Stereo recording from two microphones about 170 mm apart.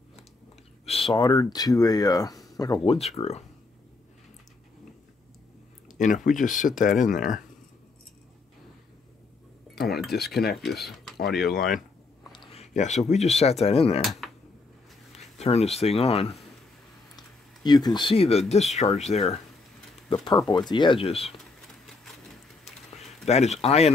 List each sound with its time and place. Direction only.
0.8 s speech: 35° left (ahead or behind)
5.9 s speech: 45° left (ahead or behind)
9.8 s speech: 70° left (ahead or behind)
10.8 s speech: centre (ahead or behind)
11.3 s speech: 60° left (ahead or behind)
12.5 s a sound: 45° left (ahead or behind)
13.1 s speech: 40° left (ahead or behind)
15.1 s speech: 40° left (ahead or behind)
17.6 s speech: 25° left (ahead or behind)
20.2 s speech: 25° left (ahead or behind)
23.2 s speech: 40° left (ahead or behind)